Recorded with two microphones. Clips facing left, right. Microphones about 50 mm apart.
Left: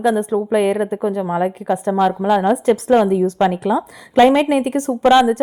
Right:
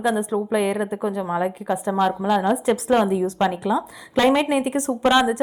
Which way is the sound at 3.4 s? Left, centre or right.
Centre.